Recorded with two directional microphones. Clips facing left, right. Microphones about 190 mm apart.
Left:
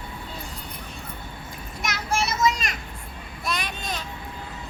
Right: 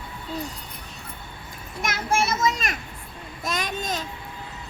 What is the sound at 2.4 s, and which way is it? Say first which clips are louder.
Children playing: left 1 dB; 50° right (ahead or behind).